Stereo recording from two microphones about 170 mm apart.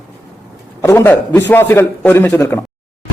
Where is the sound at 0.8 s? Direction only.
15° left (ahead or behind).